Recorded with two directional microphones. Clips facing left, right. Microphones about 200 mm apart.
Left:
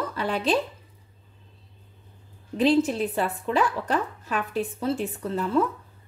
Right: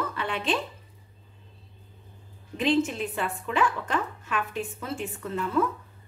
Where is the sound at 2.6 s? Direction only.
35° left (ahead or behind).